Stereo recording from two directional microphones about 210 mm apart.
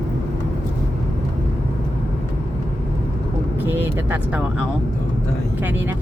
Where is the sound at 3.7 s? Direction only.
10° right (ahead or behind).